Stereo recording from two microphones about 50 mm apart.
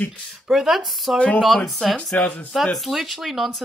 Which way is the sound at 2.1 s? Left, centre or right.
Left.